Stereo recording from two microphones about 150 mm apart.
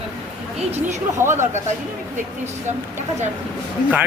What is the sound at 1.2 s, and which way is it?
Speech, 15° right (ahead or behind).